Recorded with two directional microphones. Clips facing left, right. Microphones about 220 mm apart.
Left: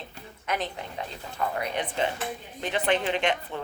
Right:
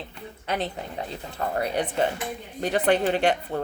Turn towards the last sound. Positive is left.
turn(degrees=-40)  # may be behind; listen again after turning